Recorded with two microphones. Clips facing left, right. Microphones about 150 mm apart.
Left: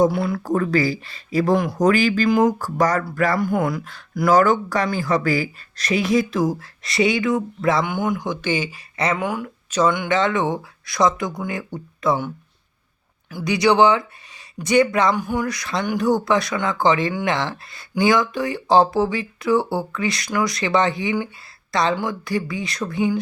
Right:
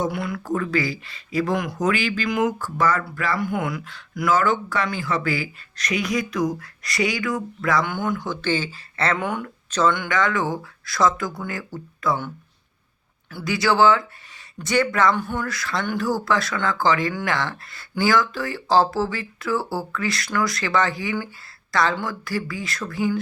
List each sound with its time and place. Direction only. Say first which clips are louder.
0.0 s speech: left 7 dB; 30° left (ahead or behind)
13.3 s speech: left 4 dB; 20° left (ahead or behind)